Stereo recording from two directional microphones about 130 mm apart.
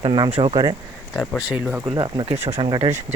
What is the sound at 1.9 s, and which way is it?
Speech, 35° right (ahead or behind).